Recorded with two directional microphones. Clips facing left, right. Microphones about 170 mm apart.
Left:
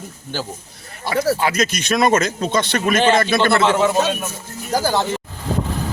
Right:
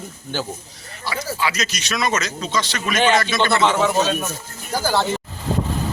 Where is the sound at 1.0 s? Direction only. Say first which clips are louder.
Left 6 dB; 50° left (ahead or behind).